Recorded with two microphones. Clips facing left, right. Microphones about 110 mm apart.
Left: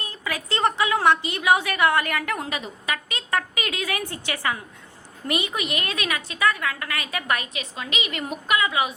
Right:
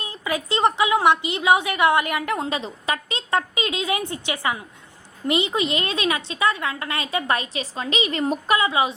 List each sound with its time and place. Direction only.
0.0 s a woman's voice: 20° right (ahead or behind)